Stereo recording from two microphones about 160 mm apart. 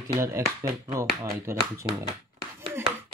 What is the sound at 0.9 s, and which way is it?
Speech, 20° right (ahead or behind).